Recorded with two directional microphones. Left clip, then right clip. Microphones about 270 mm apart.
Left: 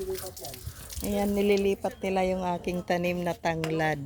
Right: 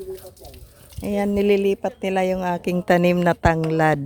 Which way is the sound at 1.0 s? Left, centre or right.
Right.